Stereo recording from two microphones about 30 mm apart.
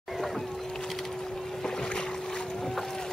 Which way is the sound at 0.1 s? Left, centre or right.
Centre.